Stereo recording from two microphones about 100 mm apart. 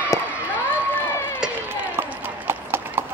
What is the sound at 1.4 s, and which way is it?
Clip-clop, 15° right (ahead or behind).